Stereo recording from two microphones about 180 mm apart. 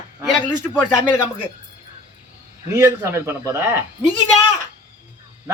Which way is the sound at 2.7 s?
15° right (ahead or behind).